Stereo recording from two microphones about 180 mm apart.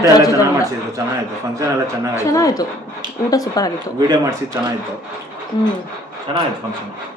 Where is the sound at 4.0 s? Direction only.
20° right (ahead or behind).